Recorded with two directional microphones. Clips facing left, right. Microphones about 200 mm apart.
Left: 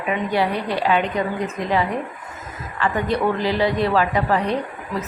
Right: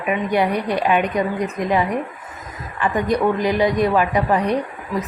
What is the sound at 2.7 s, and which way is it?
A woman's voice, 15° right (ahead or behind).